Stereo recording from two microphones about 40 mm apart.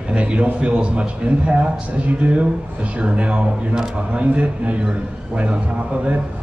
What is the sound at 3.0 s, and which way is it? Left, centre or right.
A man's voice, right.